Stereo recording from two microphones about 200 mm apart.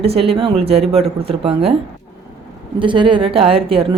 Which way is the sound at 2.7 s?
25° right (ahead or behind).